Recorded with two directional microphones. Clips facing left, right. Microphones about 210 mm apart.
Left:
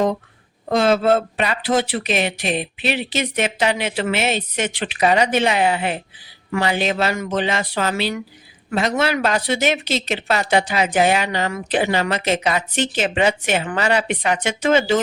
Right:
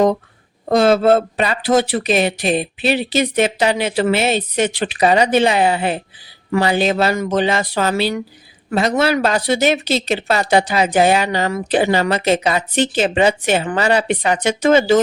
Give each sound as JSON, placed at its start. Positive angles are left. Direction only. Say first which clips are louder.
{"t": 0.7, "sound": "speech", "louder": "right 4 dB", "side_deg": -40}